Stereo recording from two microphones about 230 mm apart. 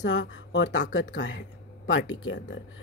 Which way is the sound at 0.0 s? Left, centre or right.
Left.